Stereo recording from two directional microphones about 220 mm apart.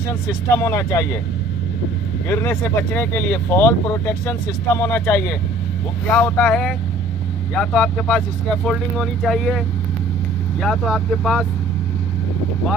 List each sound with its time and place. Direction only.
0.3 s speech: 15° left (ahead or behind)
2.2 s speech: 10° left (ahead or behind)
10.6 s speech: centre (ahead or behind)